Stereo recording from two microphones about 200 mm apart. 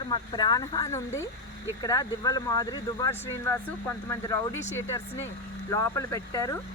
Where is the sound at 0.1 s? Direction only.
20° left (ahead or behind).